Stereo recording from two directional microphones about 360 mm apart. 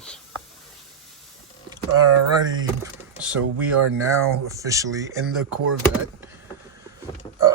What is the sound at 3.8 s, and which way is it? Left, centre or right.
Speech, right.